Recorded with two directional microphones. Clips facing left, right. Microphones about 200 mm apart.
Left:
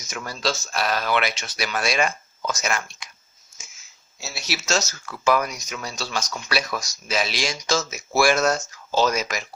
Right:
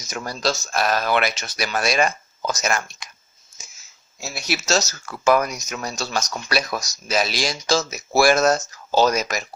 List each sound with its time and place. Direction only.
0.1 s speech: 40° right (ahead or behind)
4.6 s speech: 40° right (ahead or behind)